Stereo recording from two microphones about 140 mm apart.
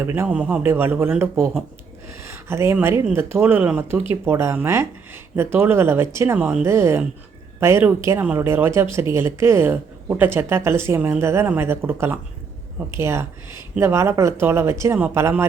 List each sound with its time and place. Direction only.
0.0 s a woman's voice: 15° right (ahead or behind)